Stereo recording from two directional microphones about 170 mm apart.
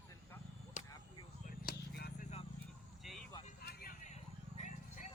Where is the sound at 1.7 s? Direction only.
65° left (ahead or behind).